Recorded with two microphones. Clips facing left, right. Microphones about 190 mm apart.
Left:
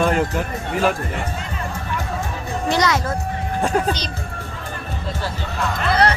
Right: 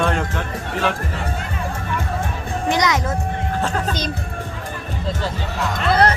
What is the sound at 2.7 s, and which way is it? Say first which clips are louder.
Music: even; 15° right (ahead or behind).